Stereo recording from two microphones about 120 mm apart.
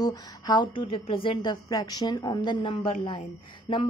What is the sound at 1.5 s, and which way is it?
A woman's voice, 30° left (ahead or behind).